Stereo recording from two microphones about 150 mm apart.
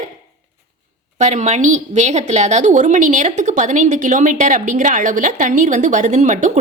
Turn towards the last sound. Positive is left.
turn(degrees=-55)  # may be behind; listen again after turning